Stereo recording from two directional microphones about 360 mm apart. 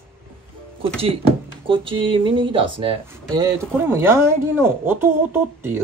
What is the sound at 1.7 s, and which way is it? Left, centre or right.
Speech, centre.